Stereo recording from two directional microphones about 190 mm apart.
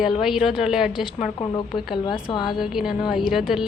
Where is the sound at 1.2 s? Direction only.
25° left (ahead or behind).